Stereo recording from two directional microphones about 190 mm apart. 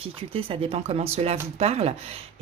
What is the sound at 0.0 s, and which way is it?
Speech, 30° right (ahead or behind).